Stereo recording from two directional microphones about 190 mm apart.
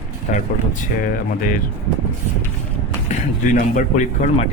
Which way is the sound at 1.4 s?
45° left (ahead or behind).